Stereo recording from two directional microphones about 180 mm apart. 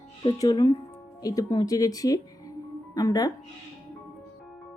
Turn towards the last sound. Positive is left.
turn(degrees=20)  # may be behind; listen again after turning